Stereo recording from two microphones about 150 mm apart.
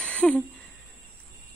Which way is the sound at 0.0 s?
5° left (ahead or behind).